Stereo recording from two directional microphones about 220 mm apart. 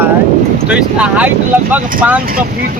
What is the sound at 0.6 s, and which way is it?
Speech, 5° right (ahead or behind).